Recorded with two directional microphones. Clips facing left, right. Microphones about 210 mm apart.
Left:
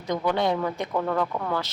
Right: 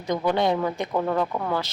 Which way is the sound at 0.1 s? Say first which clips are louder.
Right 2 dB; 15° right (ahead or behind).